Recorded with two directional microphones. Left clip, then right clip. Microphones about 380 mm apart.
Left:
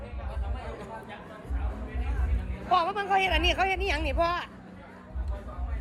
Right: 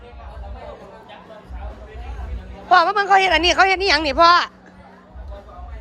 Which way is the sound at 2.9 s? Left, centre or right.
Centre.